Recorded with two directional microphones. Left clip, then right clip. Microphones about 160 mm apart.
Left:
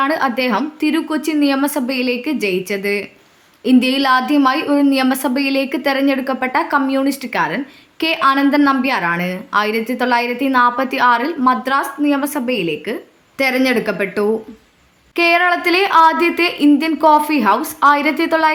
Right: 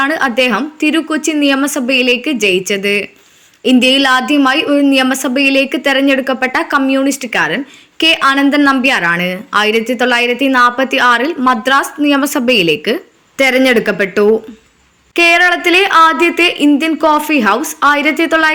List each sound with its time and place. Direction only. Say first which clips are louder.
0.0 s a woman's voice: right 4 dB; 10° right (ahead or behind); by 13.0 s 30° right (ahead or behind)
13.3 s a woman's voice: right 6 dB; 15° right (ahead or behind)